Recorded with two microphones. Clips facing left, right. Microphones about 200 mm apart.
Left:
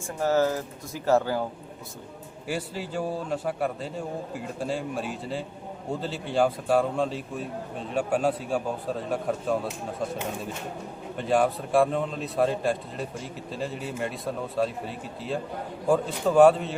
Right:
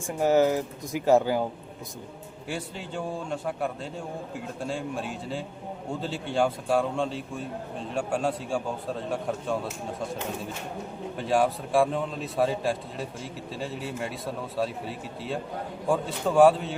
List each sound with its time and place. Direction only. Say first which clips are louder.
0.1 s speech: right 2 dB; 15° right (ahead or behind)
2.5 s a man's voice: left 3 dB; 5° left (ahead or behind)
11.2 s a man's voice: left 1 dB; centre (ahead or behind)